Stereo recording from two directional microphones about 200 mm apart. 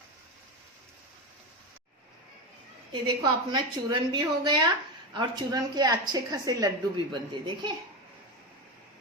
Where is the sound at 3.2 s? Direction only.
20° right (ahead or behind).